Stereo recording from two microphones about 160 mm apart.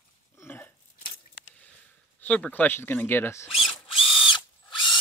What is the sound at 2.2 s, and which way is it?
Speech, 10° left (ahead or behind).